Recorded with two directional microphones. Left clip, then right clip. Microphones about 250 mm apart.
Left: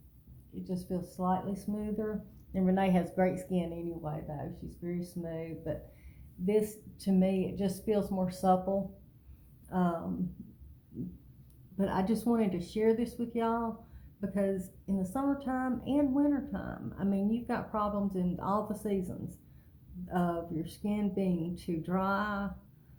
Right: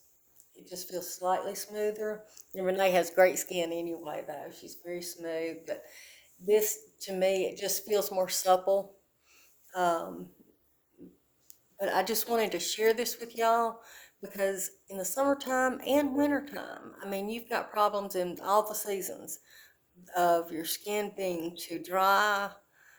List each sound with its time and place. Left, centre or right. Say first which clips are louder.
0.7 s speech: right 1 dB; right
11.8 s speech: right 3 dB; right
20.1 s speech: right 8 dB; right